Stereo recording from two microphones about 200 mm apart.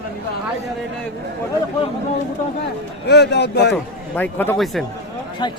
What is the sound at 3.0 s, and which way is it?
Speech, 55° left (ahead or behind).